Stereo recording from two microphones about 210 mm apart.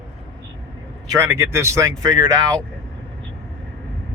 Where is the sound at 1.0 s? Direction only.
10° right (ahead or behind).